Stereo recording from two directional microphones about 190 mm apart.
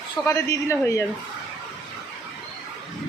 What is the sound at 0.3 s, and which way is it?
Speech, 15° left (ahead or behind).